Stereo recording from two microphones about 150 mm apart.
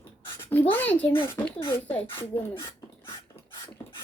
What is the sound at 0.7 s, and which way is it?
Speech, 10° left (ahead or behind).